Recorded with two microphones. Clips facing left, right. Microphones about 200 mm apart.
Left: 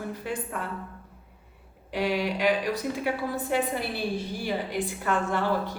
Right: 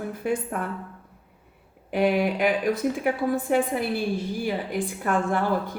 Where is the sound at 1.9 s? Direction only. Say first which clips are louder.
Right 5 dB; 55° right (ahead or behind).